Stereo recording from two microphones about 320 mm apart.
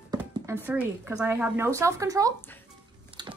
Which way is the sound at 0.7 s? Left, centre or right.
Centre.